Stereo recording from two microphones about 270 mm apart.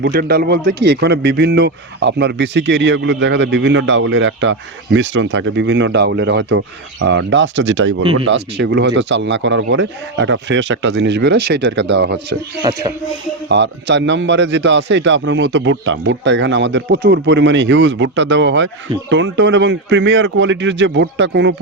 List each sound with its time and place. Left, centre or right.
0.0 s a man's voice: right
12.6 s music: centre
13.5 s a man's voice: right